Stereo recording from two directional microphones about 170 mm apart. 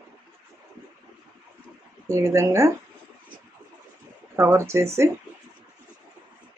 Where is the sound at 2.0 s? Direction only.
15° right (ahead or behind).